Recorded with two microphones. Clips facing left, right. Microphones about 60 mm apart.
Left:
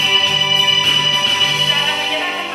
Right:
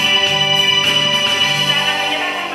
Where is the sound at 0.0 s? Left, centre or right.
Right.